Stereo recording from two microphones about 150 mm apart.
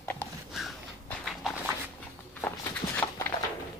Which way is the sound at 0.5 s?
Centre (ahead or behind).